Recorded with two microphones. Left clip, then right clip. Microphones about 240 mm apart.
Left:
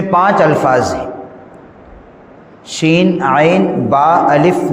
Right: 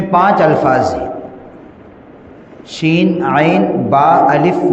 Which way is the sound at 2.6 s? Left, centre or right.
Left.